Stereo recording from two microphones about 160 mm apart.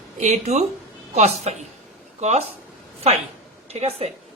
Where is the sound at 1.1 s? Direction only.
45° right (ahead or behind).